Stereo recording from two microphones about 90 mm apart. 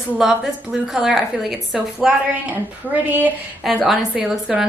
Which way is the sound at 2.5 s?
20° right (ahead or behind).